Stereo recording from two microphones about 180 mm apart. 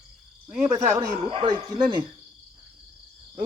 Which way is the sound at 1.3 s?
25° right (ahead or behind).